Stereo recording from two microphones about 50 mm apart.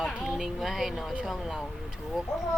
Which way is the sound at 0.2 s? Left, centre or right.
Centre.